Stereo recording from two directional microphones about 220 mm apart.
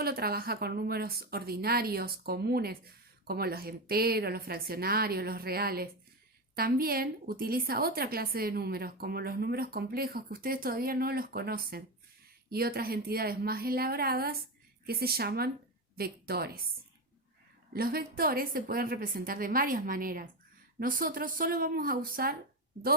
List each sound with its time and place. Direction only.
0.0 s a woman's voice: 45° right (ahead or behind)
17.7 s a woman's voice: 45° right (ahead or behind)